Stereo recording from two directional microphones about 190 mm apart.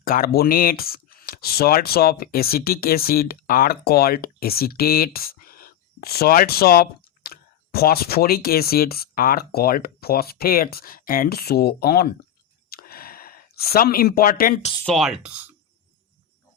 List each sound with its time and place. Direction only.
0.0 s speech: 50° left (ahead or behind)
12.7 s a sound: 50° left (ahead or behind)
14.8 s speech: centre (ahead or behind)